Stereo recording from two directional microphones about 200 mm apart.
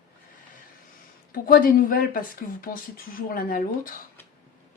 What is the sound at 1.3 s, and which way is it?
Speech, 45° left (ahead or behind).